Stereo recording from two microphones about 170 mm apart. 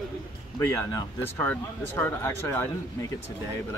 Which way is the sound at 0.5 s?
20° left (ahead or behind).